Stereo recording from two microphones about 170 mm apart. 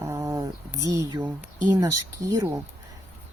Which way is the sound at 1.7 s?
20° right (ahead or behind).